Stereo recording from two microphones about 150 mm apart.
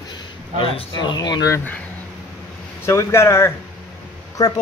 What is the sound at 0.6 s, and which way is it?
Speech, 35° left (ahead or behind).